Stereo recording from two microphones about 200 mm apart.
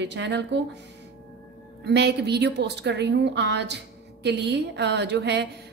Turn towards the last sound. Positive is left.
turn(degrees=-60)  # may be behind; listen again after turning